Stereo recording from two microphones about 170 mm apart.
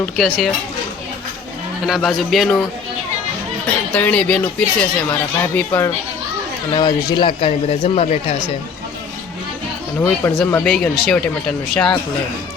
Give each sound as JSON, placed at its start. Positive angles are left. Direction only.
{"t": 0.0, "sound": "speech", "side_deg": 0}
{"t": 1.9, "sound": "speech", "side_deg": 0}
{"t": 3.9, "sound": "speech", "side_deg": 10}
{"t": 6.7, "sound": "speech", "side_deg": 25}
{"t": 10.0, "sound": "speech", "side_deg": 10}